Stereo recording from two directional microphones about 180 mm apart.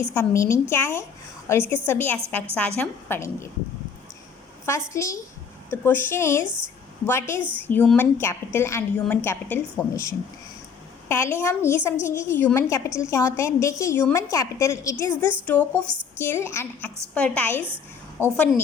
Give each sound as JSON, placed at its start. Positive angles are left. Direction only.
{"t": 0.1, "sound": "a woman's voice", "side_deg": 15}
{"t": 4.9, "sound": "a woman's voice", "side_deg": 15}